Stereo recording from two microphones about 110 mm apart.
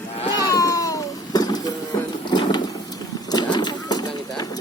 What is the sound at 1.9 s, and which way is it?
Printer, 30° left (ahead or behind).